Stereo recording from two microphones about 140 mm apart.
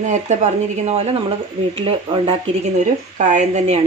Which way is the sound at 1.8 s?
40° right (ahead or behind).